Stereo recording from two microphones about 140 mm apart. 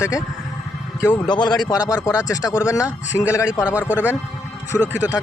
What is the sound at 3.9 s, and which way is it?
Speech, 10° right (ahead or behind).